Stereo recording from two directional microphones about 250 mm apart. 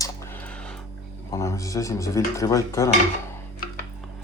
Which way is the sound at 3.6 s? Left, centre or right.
Left.